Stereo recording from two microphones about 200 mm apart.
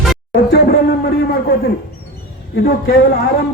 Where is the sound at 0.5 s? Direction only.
50° left (ahead or behind).